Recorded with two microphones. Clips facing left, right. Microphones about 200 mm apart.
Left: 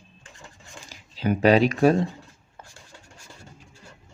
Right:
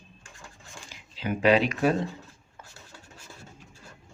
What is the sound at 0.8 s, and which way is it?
Speech, 40° left (ahead or behind).